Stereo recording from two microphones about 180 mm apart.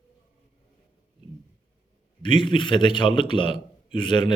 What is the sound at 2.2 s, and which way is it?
A man's voice, 25° left (ahead or behind).